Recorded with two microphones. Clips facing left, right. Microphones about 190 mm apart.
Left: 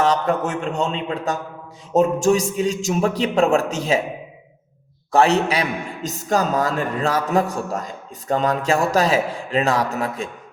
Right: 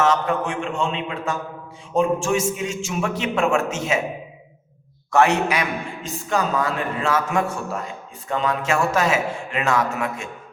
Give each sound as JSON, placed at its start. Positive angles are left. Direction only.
{"t": 0.0, "sound": "a man's voice", "side_deg": 35}
{"t": 5.1, "sound": "a man's voice", "side_deg": 30}